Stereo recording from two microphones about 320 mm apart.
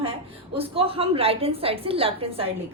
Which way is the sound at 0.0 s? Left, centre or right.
Centre.